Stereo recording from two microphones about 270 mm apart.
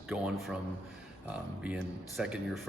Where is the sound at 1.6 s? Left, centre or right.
Centre.